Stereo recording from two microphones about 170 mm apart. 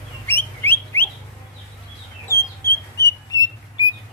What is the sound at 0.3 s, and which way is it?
Bird, 15° left (ahead or behind).